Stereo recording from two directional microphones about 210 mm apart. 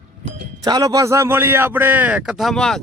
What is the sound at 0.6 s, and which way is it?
A man's voice, 20° right (ahead or behind).